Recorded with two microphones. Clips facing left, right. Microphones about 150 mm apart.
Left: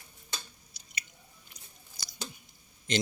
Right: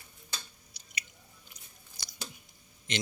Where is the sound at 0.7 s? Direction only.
35° left (ahead or behind).